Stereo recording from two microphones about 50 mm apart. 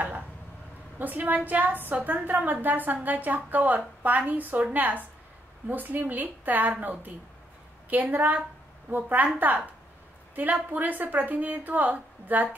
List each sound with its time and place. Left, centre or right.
0.9 s a woman's voice: right